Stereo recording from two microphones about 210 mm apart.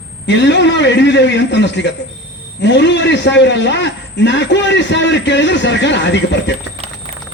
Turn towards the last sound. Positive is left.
turn(degrees=60)  # may be behind; listen again after turning